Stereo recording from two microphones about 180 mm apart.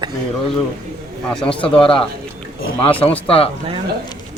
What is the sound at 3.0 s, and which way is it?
Speech, 30° left (ahead or behind).